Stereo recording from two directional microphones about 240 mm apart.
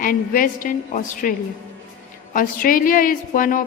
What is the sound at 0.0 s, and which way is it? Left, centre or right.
A woman's voice, left.